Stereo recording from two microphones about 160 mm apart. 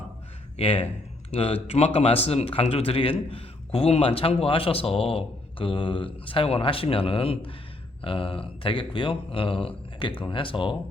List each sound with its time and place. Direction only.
0.5 s a man's voice: 35° left (ahead or behind)